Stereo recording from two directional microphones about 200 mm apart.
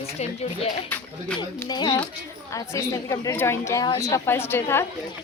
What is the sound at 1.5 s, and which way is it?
A woman's voice, 20° left (ahead or behind).